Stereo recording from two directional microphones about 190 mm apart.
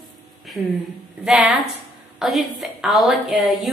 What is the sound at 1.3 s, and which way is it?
A woman's voice, centre (ahead or behind).